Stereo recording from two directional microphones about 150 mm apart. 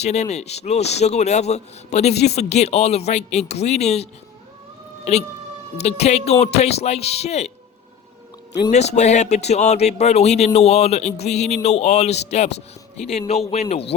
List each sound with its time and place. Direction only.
0.0 s a man's voice: 50° left (ahead or behind)
8.7 s a man's voice: 50° left (ahead or behind)